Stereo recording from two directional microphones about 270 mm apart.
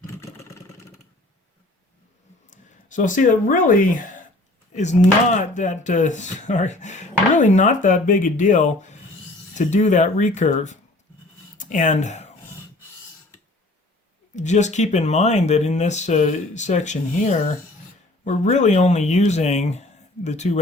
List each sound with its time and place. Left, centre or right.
0.2 s vehicle: centre
2.5 s speech: left
14.3 s speech: left